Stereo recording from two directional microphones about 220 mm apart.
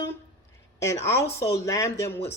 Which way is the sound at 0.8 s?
15° left (ahead or behind).